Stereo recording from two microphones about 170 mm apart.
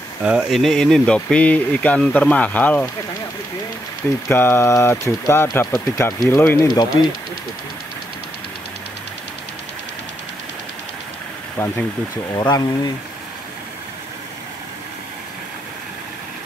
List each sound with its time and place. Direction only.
0.2 s speech: 5° right (ahead or behind)
4.3 s speech: 15° left (ahead or behind)
11.5 s speech: 10° left (ahead or behind)
12.4 s speech: 25° left (ahead or behind)